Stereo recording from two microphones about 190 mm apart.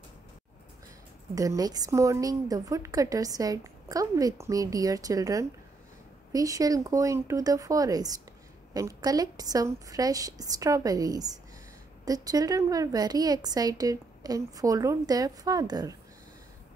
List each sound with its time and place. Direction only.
1.3 s a woman's voice: 20° right (ahead or behind)